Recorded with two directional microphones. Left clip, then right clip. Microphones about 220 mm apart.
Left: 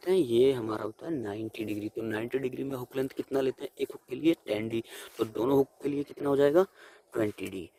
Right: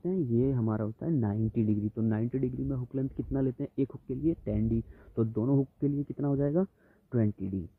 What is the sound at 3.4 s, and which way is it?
Speech, 35° left (ahead or behind).